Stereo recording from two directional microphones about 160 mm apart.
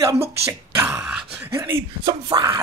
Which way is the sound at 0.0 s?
15° right (ahead or behind).